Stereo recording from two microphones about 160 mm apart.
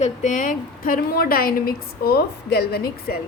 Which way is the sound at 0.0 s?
50° left (ahead or behind).